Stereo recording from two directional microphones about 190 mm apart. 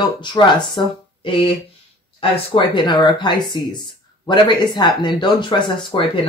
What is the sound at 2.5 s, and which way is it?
Speech, 25° left (ahead or behind).